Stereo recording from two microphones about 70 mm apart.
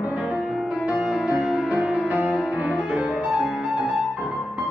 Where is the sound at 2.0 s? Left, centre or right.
Centre.